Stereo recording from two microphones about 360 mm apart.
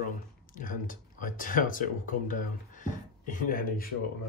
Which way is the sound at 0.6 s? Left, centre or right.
Left.